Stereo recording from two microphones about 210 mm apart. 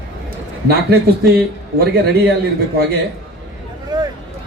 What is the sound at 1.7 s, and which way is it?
Speech, 50° right (ahead or behind).